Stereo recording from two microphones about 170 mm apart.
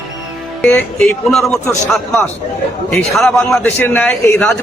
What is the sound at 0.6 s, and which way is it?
Speech, 5° left (ahead or behind).